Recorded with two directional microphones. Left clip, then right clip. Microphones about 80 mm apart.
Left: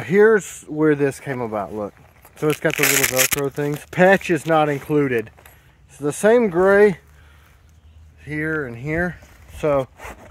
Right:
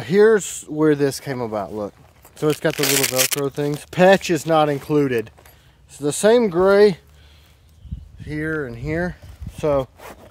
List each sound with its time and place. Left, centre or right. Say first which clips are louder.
0.0 s speech: even; right
2.7 s speech: left 2 dB; right
3.4 s speech: even; right
3.7 s speech: right 1 dB; right
8.2 s speech: left 1 dB; right
9.9 s speech: left 2 dB; centre